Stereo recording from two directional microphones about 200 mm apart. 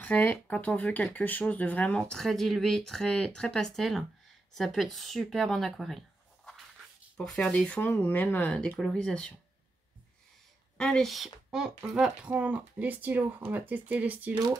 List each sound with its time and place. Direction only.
0.0 s speech: 10° left (ahead or behind)
10.8 s speech: 5° left (ahead or behind)
14.3 s speech: 20° right (ahead or behind)